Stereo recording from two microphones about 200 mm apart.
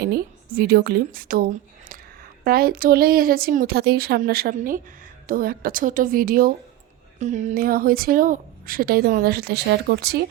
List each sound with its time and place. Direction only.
0.0 s a woman's voice: 50° right (ahead or behind)